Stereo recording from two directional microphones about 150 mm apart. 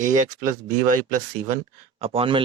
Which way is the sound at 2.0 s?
40° right (ahead or behind).